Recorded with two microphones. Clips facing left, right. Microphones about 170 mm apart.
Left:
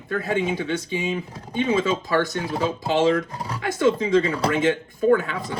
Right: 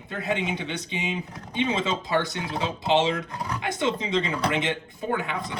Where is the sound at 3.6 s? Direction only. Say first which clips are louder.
Left 7 dB; 20° right (ahead or behind).